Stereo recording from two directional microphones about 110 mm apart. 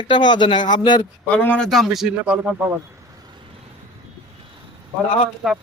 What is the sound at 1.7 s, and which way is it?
Speech, centre (ahead or behind).